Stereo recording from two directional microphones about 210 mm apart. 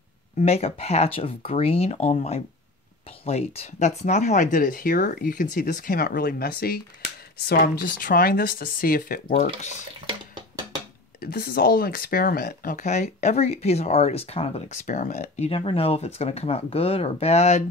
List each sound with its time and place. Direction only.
0.4 s speech: 30° left (ahead or behind)
11.1 s speech: 45° left (ahead or behind); by 17.6 s 30° left (ahead or behind)